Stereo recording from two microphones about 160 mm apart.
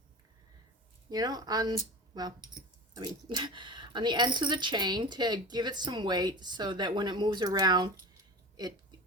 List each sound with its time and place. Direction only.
1.1 s speech: 25° right (ahead or behind)